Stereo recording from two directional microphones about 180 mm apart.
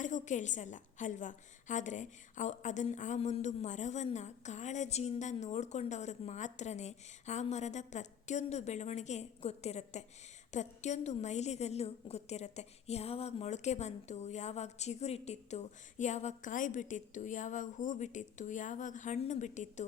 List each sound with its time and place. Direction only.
0.0 s a woman's voice: 45° left (ahead or behind)